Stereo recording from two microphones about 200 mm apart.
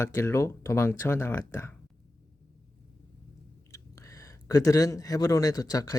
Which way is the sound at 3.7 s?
15° left (ahead or behind).